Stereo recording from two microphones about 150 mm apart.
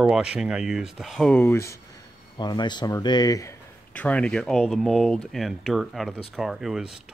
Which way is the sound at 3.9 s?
10° left (ahead or behind).